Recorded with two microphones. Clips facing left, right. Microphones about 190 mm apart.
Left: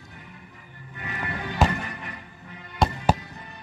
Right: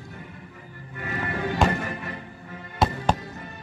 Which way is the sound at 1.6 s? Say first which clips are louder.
Even; 5° left (ahead or behind).